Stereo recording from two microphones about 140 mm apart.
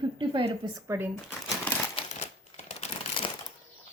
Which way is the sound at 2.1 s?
50° left (ahead or behind).